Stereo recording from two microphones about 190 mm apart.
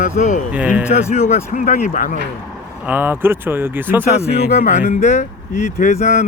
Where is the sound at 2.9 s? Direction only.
10° right (ahead or behind).